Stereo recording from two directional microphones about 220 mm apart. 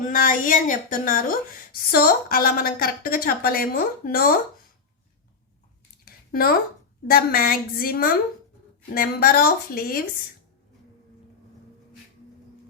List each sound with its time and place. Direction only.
0.0 s speech: 35° left (ahead or behind)
6.1 s a sound: 40° left (ahead or behind)
7.1 s a woman's voice: 40° left (ahead or behind)